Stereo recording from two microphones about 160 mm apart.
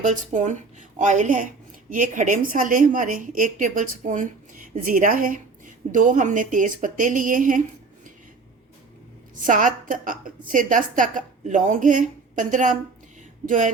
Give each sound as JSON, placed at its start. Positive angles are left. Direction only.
{"t": 0.0, "sound": "a woman's voice", "side_deg": -50}
{"t": 9.3, "sound": "a woman's voice", "side_deg": -55}